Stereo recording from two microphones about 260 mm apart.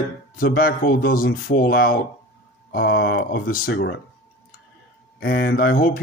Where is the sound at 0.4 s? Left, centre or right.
Left.